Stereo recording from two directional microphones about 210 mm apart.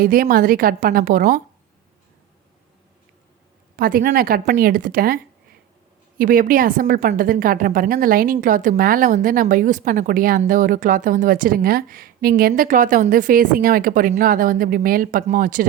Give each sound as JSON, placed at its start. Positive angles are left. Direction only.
{"t": 0.0, "sound": "a woman's voice", "side_deg": -45}
{"t": 3.8, "sound": "a woman's voice", "side_deg": -45}